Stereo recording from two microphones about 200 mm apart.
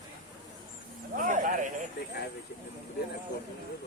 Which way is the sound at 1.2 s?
40° right (ahead or behind).